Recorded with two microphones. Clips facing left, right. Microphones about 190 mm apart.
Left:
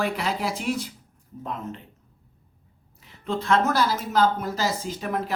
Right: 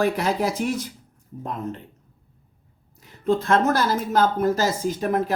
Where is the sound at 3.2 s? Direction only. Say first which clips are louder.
Right 3 dB; 45° right (ahead or behind).